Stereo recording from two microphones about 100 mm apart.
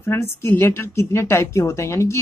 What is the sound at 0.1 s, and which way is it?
A woman's voice, 25° left (ahead or behind).